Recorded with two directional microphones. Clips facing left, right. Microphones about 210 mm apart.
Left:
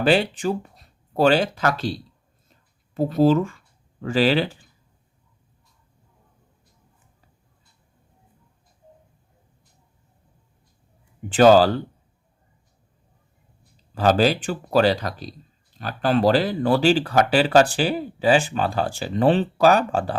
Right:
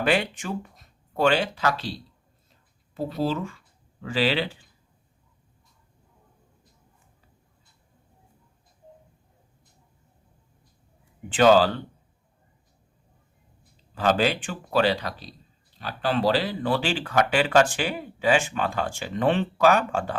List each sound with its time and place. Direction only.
0.0 s speech: 30° left (ahead or behind)
2.9 s speech: 45° left (ahead or behind)
11.3 s speech: 40° left (ahead or behind)
13.9 s speech: 40° left (ahead or behind)